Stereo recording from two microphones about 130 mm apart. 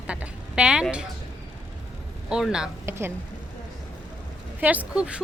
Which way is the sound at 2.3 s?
5° right (ahead or behind).